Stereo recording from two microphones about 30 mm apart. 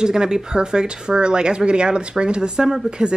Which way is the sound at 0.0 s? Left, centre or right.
Right.